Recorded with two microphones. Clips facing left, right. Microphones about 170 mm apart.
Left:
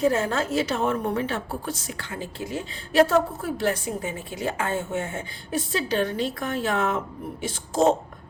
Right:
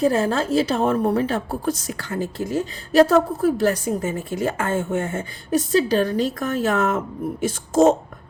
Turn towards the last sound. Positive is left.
turn(degrees=-45)  # may be behind; listen again after turning